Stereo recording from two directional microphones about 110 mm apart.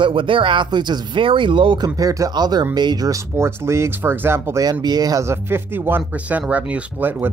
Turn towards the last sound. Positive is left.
turn(degrees=-15)  # may be behind; listen again after turning